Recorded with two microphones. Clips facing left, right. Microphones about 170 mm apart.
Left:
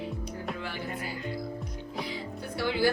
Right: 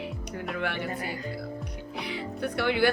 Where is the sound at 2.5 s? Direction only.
65° right (ahead or behind).